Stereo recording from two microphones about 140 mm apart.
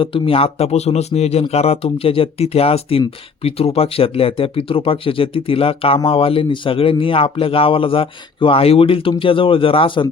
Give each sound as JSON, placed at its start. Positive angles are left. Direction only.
{"t": 0.0, "sound": "speech", "side_deg": 40}